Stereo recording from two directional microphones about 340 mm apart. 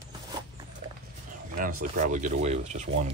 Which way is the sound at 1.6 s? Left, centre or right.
Right.